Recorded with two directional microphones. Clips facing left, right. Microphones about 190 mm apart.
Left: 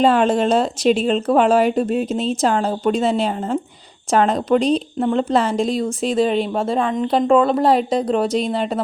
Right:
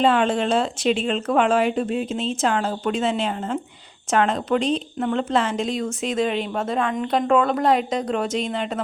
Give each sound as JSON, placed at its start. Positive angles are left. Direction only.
{"t": 0.0, "sound": "speech", "side_deg": 40}